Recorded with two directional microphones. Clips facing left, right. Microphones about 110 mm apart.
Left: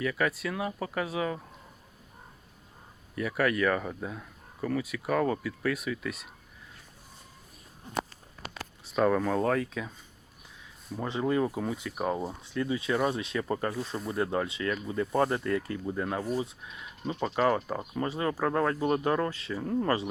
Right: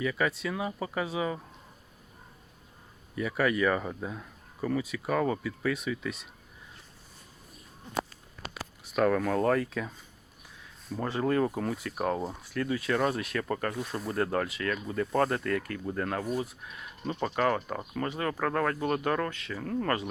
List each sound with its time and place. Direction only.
0.0 s speech: 5° right (ahead or behind)
3.2 s speech: 5° right (ahead or behind)
9.0 s speech: 5° left (ahead or behind)
11.2 s speech: 10° left (ahead or behind)
12.4 s speech: 20° left (ahead or behind)
13.8 s speech: centre (ahead or behind)
14.3 s speech: 25° left (ahead or behind)
15.9 s speech: 10° left (ahead or behind)
16.6 s speech: 5° right (ahead or behind)
17.1 s speech: 15° left (ahead or behind)
19.3 s speech: 30° left (ahead or behind)
19.5 s speech: 15° left (ahead or behind)